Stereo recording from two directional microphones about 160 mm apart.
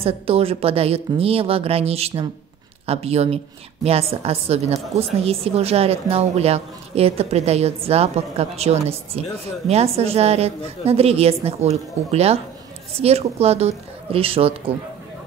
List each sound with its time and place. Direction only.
0.0 s a woman's voice: 35° right (ahead or behind)